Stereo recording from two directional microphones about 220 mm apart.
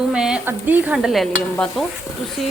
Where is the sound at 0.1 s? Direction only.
5° right (ahead or behind).